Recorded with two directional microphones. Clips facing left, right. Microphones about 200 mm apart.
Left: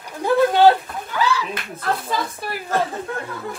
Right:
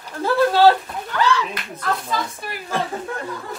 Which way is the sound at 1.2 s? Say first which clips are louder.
Right 2 dB; 5° left (ahead or behind).